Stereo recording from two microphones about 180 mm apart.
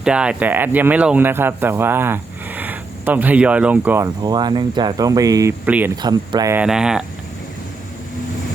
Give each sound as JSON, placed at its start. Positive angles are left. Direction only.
{"t": 0.0, "sound": "speech", "side_deg": -5}
{"t": 6.0, "sound": "speech", "side_deg": -25}
{"t": 6.6, "sound": "speech", "side_deg": -5}